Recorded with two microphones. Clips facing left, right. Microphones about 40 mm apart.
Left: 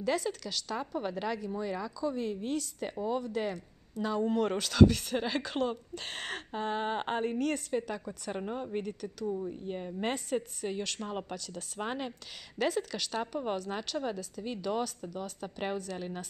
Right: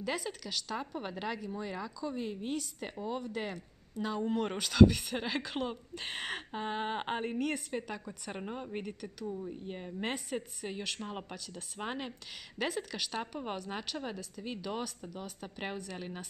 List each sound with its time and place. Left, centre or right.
0.0 s a woman's voice: centre